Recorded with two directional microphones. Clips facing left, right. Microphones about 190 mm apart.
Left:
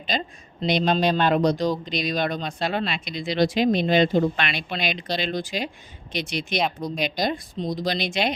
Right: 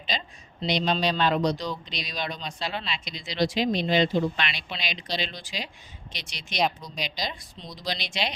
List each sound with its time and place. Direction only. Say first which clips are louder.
0.1 s speech: left 6 dB; 50° left (ahead or behind)